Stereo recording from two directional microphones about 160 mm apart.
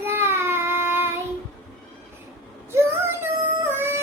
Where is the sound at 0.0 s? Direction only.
15° right (ahead or behind).